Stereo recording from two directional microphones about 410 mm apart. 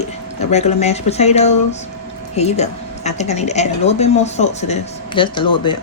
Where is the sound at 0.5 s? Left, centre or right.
Centre.